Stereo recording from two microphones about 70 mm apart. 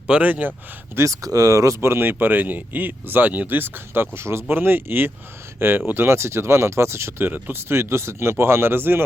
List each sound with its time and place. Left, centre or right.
0.1 s speech: right
0.9 s speech: right
7.3 s speech: right